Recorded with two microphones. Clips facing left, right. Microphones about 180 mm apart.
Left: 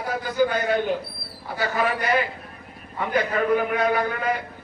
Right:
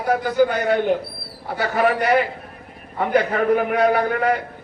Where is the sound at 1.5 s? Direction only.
65° right (ahead or behind).